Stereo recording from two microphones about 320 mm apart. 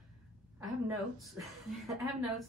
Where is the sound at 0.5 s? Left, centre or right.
Centre.